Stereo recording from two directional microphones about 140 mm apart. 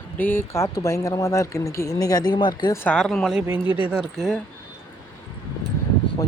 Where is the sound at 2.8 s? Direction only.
5° left (ahead or behind).